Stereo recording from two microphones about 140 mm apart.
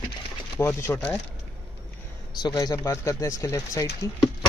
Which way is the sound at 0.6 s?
20° left (ahead or behind).